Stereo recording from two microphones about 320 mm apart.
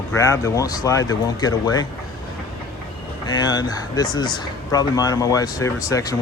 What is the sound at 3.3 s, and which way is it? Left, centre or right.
Speech, centre.